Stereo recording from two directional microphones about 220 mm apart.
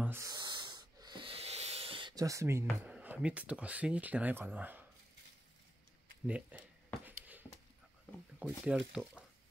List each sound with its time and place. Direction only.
0.0 s rub: 10° right (ahead or behind)
2.8 s speech: 5° right (ahead or behind)
6.2 s speech: 5° right (ahead or behind)
7.1 s a sound: 10° right (ahead or behind)
8.4 s speech: 5° right (ahead or behind)